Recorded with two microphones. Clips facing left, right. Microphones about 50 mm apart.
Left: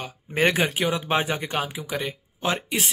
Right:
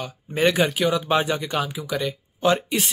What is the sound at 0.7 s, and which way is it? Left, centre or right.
Speech, left.